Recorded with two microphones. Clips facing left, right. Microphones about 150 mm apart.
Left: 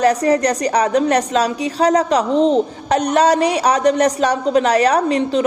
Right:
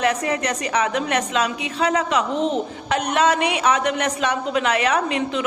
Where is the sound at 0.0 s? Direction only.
40° left (ahead or behind).